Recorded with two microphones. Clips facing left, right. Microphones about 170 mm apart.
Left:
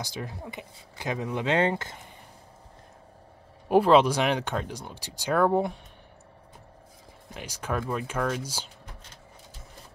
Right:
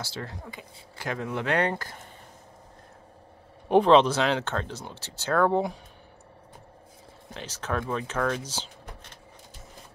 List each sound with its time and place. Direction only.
0.0 s speech: 15° left (ahead or behind)
3.6 s speech: 5° left (ahead or behind)
7.3 s speech: 10° left (ahead or behind)